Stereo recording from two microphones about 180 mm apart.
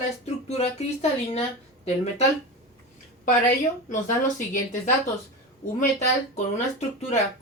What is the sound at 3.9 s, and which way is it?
Speech, 45° left (ahead or behind).